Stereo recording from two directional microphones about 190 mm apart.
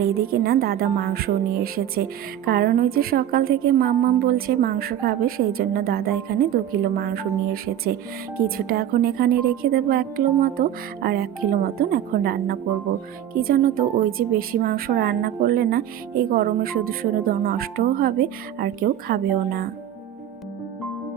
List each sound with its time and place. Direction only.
0.0 s a woman's voice: 55° right (ahead or behind)